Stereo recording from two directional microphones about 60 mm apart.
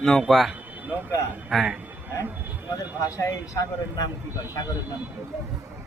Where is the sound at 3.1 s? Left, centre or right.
Left.